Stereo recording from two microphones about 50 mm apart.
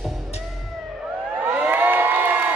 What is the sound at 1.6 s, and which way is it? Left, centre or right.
Crowd, right.